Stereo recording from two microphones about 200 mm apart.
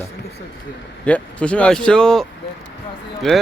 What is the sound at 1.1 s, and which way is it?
Speech, 5° left (ahead or behind).